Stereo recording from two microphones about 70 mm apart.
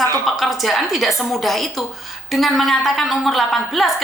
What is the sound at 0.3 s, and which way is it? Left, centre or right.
A woman's voice, centre.